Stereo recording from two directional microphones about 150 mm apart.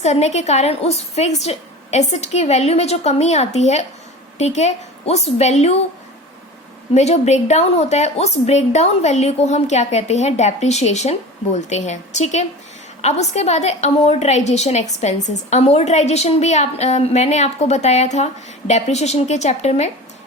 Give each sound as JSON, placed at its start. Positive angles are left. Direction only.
{"t": 0.0, "sound": "a woman's voice", "side_deg": 45}
{"t": 6.9, "sound": "a woman's voice", "side_deg": 50}